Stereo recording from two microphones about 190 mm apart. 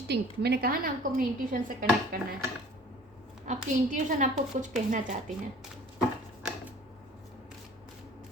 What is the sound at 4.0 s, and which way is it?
A woman's voice, 40° right (ahead or behind).